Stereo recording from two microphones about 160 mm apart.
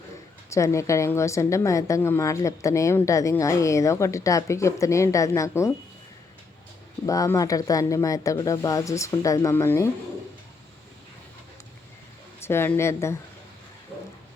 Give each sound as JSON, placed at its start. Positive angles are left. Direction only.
{"t": 0.5, "sound": "a woman's voice", "side_deg": 20}
{"t": 7.0, "sound": "a woman's voice", "side_deg": 20}
{"t": 12.4, "sound": "a woman's voice", "side_deg": 15}